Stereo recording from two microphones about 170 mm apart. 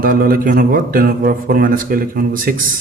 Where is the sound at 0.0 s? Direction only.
55° right (ahead or behind).